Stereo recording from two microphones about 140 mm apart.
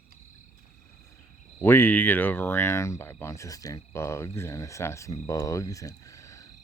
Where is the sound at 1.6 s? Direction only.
15° left (ahead or behind).